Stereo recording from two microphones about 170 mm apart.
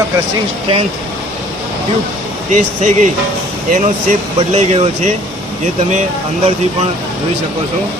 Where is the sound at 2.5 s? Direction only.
45° right (ahead or behind).